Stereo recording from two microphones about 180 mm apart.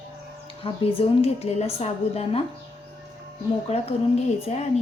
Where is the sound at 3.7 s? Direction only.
35° left (ahead or behind).